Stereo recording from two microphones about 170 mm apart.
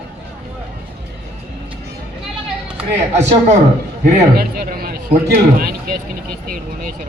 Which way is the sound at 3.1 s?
40° right (ahead or behind).